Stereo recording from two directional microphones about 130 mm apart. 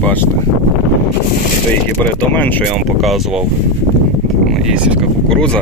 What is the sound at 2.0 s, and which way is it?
Speech, 15° left (ahead or behind).